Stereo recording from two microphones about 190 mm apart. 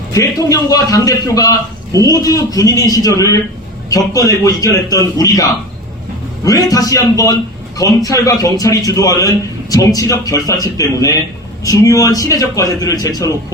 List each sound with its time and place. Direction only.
0.1 s a man's voice: 15° left (ahead or behind)